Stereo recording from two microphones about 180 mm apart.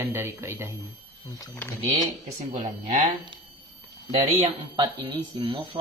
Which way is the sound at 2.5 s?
45° right (ahead or behind).